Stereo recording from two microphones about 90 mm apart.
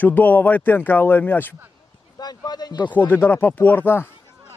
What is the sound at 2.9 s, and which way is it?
Speech, 20° left (ahead or behind).